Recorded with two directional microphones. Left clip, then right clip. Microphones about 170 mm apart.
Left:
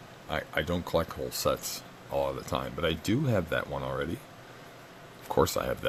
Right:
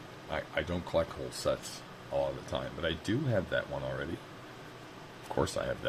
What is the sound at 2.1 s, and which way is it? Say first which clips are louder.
Speech: left 3 dB; 55° left (ahead or behind).